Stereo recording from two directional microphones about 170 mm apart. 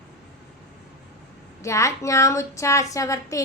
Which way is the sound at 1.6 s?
20° left (ahead or behind).